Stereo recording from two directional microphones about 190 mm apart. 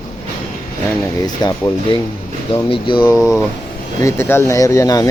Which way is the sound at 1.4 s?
20° left (ahead or behind).